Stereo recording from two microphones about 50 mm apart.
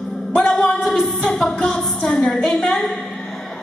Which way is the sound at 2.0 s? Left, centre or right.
Centre.